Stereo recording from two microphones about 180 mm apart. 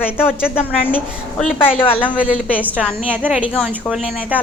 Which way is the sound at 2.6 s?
10° right (ahead or behind).